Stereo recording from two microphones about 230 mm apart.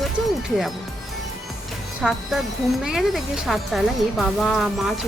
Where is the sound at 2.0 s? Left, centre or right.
Centre.